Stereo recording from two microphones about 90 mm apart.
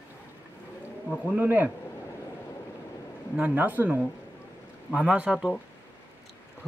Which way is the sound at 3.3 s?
15° right (ahead or behind).